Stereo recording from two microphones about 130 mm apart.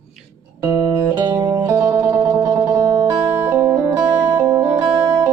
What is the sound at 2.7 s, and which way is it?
Music, 25° right (ahead or behind).